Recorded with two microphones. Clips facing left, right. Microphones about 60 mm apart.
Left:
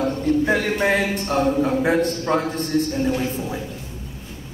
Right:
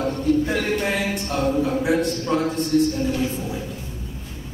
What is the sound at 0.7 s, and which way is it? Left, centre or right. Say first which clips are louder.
A man's voice: left 3 dB; left.